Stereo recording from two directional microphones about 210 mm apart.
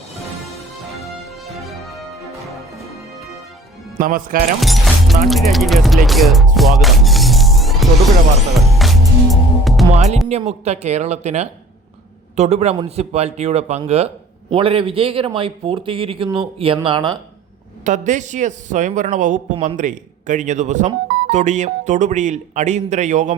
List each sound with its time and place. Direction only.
1.0 s music: centre (ahead or behind)
3.9 s speech: 40° right (ahead or behind)
4.6 s music: centre (ahead or behind)
5.3 s speech: centre (ahead or behind)
8.5 s music: centre (ahead or behind)
9.9 s speech: 30° right (ahead or behind)
17.8 s speech: 35° right (ahead or behind)